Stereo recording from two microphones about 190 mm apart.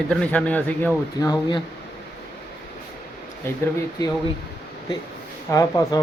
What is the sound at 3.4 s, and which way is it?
Speech, 15° left (ahead or behind).